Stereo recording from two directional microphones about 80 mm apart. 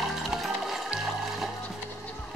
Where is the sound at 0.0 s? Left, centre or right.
Centre.